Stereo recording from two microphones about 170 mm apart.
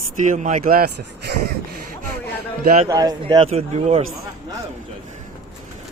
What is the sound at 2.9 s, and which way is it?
A man's voice, 20° right (ahead or behind).